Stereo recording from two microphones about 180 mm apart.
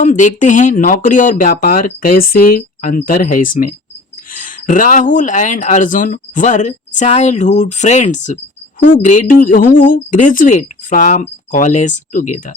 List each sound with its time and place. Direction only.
0.0 s speech: 45° left (ahead or behind)